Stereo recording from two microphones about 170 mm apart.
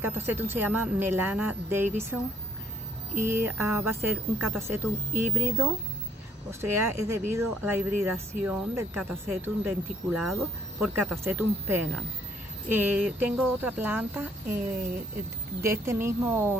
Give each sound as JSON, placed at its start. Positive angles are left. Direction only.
{"t": 0.3, "sound": "a woman's voice", "side_deg": -10}
{"t": 3.2, "sound": "a woman's voice", "side_deg": -15}
{"t": 10.2, "sound": "speech", "side_deg": 0}
{"t": 11.0, "sound": "a woman's voice", "side_deg": -10}
{"t": 15.6, "sound": "a woman's voice", "side_deg": -15}